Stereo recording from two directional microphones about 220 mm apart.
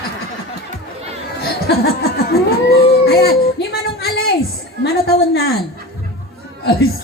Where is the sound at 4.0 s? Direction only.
45° left (ahead or behind).